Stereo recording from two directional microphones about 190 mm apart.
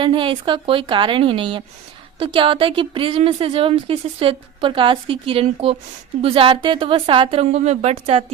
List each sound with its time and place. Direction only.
0.0 s a woman's voice: 25° right (ahead or behind)